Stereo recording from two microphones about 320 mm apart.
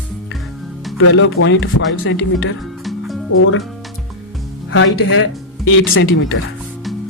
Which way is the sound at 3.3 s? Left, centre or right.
Left.